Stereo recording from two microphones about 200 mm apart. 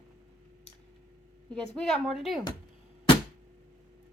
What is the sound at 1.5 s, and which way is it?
Speech, 5° left (ahead or behind).